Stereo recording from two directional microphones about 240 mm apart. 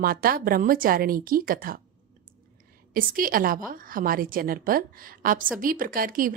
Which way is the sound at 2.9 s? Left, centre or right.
Right.